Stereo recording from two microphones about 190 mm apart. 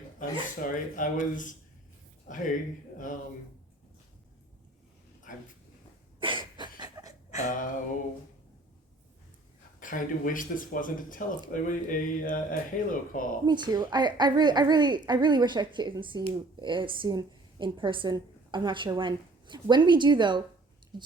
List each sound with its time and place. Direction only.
0.2 s speech: 45° left (ahead or behind)
6.2 s cough: 25° right (ahead or behind)
7.4 s speech: 45° left (ahead or behind)
9.8 s speech: 45° left (ahead or behind)
13.4 s a woman's voice: 20° right (ahead or behind)